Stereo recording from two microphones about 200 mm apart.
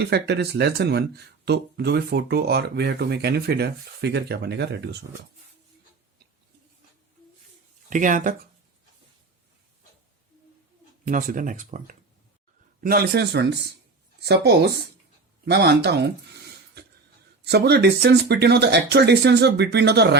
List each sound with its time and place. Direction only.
0.0 s speech: 55° right (ahead or behind)
7.9 s speech: 40° right (ahead or behind)
11.0 s a man's voice: 40° right (ahead or behind)